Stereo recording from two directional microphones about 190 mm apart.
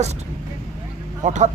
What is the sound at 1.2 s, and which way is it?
Speech, 40° right (ahead or behind).